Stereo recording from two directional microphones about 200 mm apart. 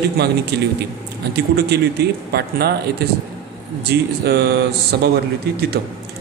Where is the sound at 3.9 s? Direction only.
55° right (ahead or behind).